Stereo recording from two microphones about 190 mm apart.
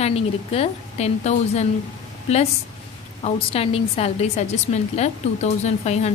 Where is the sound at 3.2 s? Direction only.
30° left (ahead or behind).